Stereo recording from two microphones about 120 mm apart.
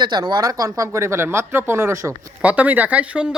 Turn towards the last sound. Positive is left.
turn(degrees=-10)  # may be behind; listen again after turning